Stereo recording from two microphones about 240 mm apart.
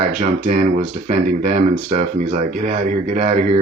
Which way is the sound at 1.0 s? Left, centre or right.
Right.